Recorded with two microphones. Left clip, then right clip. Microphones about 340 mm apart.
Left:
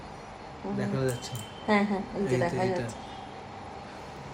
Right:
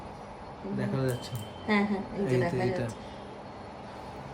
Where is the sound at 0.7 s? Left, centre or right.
Centre.